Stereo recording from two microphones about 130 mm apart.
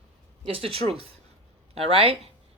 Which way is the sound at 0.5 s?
45° right (ahead or behind).